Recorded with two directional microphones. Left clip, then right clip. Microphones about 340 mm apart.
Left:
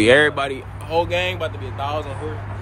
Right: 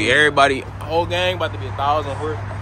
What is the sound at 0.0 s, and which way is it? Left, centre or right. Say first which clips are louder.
Speech: left 1 dB; centre.